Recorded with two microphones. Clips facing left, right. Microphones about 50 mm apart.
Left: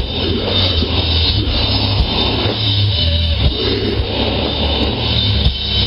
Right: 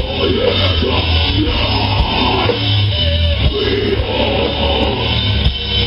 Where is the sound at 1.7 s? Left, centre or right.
Right.